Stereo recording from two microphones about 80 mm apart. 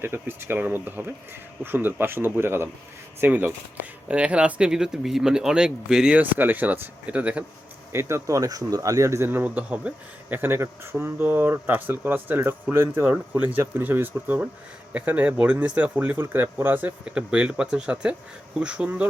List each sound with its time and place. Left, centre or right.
0.0 s speech: right; by 6.1 s centre
6.1 s speech: right
7.9 s speech: right
8.4 s speech: right
17.1 s speech: centre